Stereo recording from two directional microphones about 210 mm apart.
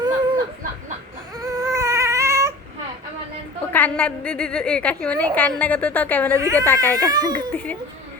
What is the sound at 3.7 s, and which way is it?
A woman's voice, 5° left (ahead or behind).